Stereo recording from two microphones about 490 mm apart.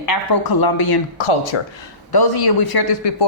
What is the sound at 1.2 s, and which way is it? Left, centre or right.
Speech, left.